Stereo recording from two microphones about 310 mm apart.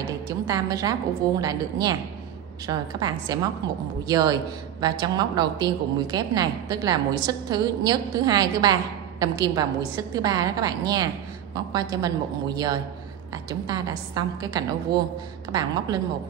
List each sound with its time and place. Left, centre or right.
0.3 s a woman's voice: centre